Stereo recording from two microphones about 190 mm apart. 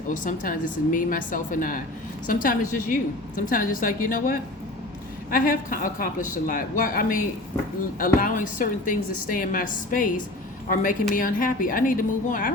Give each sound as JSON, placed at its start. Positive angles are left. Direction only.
{"t": 0.1, "sound": "a woman's voice", "side_deg": 45}